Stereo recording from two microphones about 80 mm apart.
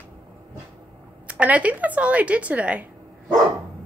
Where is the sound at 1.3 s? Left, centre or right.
Centre.